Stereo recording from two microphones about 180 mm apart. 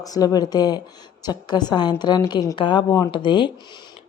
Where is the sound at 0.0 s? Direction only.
20° left (ahead or behind).